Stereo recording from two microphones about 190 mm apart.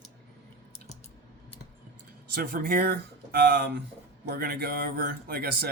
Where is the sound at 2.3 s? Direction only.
50° right (ahead or behind).